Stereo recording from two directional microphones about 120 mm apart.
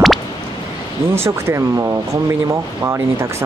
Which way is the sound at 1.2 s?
25° right (ahead or behind).